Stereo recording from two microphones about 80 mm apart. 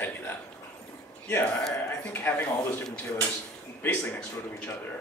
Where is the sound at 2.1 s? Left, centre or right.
Left.